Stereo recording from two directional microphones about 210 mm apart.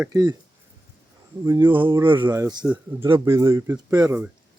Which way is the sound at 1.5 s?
20° right (ahead or behind).